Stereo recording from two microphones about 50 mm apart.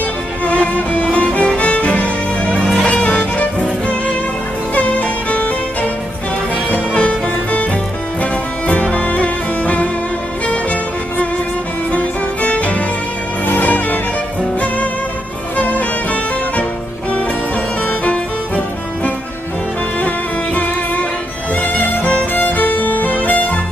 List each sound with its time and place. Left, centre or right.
0.5 s music: left
6.9 s music: left
17.8 s music: left
21.5 s music: left